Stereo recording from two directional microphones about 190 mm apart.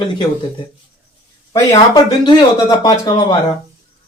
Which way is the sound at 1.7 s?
20° left (ahead or behind).